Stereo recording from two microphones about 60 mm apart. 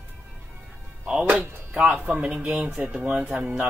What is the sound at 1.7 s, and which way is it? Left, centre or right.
Speech, right.